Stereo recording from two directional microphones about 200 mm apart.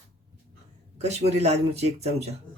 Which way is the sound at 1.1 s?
35° right (ahead or behind).